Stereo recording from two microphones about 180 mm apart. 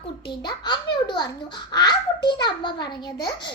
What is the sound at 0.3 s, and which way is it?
A child's voice, 25° left (ahead or behind).